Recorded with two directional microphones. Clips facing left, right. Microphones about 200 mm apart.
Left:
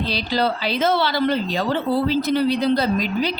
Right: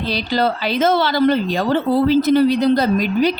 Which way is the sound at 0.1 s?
50° right (ahead or behind).